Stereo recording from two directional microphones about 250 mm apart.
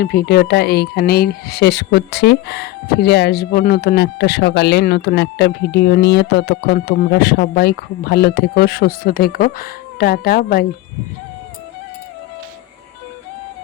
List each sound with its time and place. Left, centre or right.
0.0 s speech: left